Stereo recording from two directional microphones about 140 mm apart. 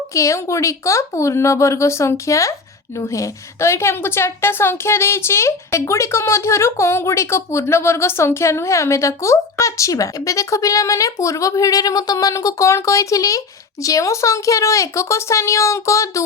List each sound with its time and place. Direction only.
0.1 s speech: 20° left (ahead or behind)